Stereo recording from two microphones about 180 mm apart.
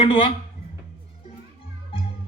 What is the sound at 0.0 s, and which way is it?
Speech, 30° left (ahead or behind).